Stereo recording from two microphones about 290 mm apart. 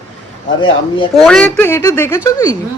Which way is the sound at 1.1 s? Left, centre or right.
Centre.